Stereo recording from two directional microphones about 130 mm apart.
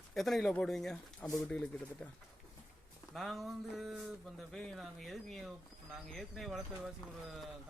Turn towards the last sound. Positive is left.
turn(degrees=0)  # may be behind; listen again after turning